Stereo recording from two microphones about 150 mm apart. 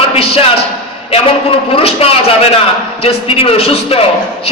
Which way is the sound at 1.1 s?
40° left (ahead or behind).